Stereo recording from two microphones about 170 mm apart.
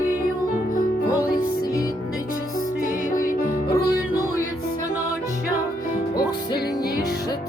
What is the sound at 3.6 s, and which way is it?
Music, 20° left (ahead or behind).